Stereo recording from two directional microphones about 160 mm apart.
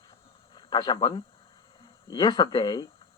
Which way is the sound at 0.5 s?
25° left (ahead or behind).